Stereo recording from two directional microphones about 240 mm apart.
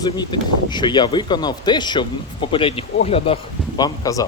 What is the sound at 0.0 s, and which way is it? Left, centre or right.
Speech, centre.